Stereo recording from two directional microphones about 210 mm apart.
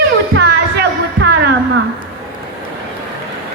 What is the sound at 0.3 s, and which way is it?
Music, 50° right (ahead or behind).